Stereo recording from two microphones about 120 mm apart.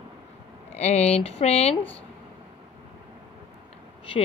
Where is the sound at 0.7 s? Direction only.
65° left (ahead or behind).